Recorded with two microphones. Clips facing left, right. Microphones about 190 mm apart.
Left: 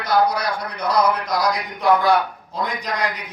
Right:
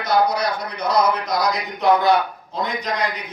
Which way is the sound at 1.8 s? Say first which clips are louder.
Right 1 dB; 20° right (ahead or behind).